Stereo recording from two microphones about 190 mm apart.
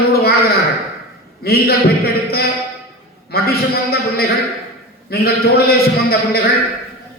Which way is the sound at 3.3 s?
55° left (ahead or behind).